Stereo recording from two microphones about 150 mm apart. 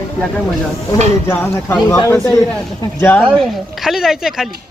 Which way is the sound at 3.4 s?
Centre (ahead or behind).